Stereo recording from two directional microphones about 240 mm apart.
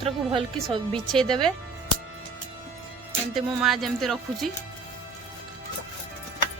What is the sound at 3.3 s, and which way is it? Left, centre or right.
Speech, centre.